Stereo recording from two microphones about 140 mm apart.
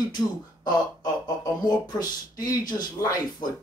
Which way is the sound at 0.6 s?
30° left (ahead or behind).